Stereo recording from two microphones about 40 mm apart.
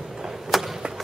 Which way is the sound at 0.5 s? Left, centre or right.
Centre.